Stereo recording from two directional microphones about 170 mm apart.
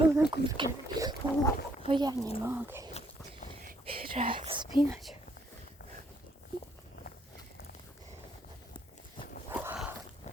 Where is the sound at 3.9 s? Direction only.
35° right (ahead or behind).